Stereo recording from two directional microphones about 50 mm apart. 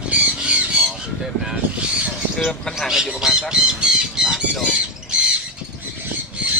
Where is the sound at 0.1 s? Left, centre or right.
Right.